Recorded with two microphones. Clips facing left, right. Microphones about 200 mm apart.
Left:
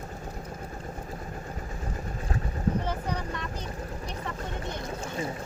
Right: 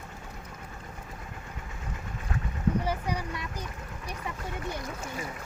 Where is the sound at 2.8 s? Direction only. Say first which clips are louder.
Even; 10° right (ahead or behind).